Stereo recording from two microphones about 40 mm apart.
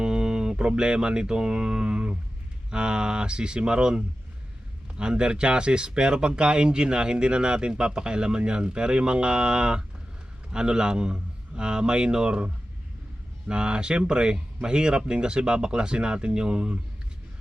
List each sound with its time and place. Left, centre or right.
0.0 s music: centre
2.6 s speech: right
13.5 s speech: right